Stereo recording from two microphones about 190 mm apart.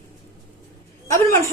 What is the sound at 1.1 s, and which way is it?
Speech, 15° left (ahead or behind).